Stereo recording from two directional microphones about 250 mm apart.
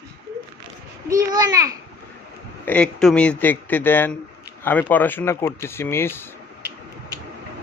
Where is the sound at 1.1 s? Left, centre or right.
Centre.